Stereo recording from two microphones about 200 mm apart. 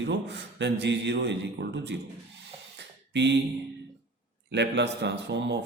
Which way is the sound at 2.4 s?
60° right (ahead or behind).